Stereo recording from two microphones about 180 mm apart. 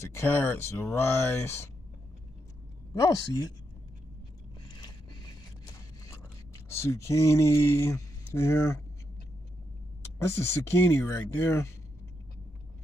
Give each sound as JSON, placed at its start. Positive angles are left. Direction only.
{"t": 0.0, "sound": "speech", "side_deg": 15}
{"t": 2.9, "sound": "speech", "side_deg": 20}
{"t": 6.8, "sound": "speech", "side_deg": 15}
{"t": 10.5, "sound": "speech", "side_deg": 15}